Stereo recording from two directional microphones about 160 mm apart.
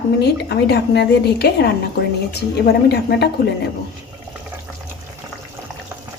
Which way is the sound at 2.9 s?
90° left.